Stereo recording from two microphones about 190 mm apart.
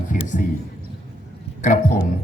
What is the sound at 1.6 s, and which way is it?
Speech, 40° left (ahead or behind).